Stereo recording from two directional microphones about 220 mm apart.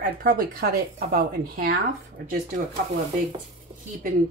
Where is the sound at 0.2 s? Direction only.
40° right (ahead or behind).